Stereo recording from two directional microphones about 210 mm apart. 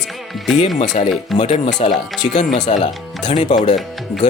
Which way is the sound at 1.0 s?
30° left (ahead or behind).